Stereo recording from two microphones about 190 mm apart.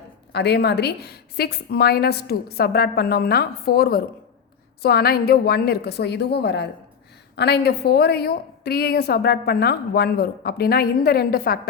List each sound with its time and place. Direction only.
0.3 s a woman's voice: 60° left (ahead or behind)